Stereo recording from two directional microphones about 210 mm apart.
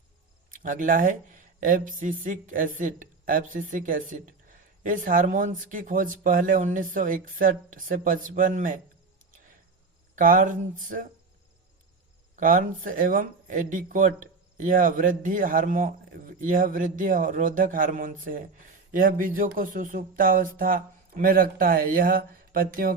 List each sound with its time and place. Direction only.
0.5 s a woman's voice: 40° right (ahead or behind)
10.2 s a woman's voice: 40° right (ahead or behind)
12.4 s a woman's voice: 40° right (ahead or behind)